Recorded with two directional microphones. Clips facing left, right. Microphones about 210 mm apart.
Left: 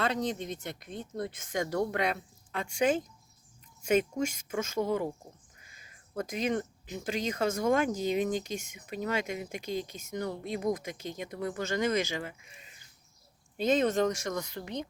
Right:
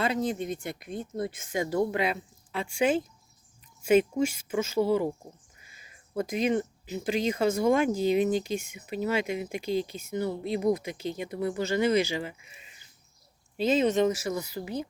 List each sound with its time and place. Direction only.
0.0 s speech: 5° right (ahead or behind)
6.1 s speech: 10° right (ahead or behind)
12.4 s speech: 45° left (ahead or behind)
13.9 s speech: 5° right (ahead or behind)